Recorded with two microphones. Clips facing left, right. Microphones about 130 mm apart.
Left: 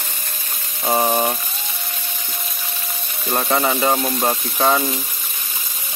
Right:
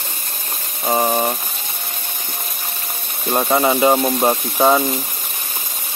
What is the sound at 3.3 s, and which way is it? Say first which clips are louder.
Speech: right 3 dB; 15° right (ahead or behind).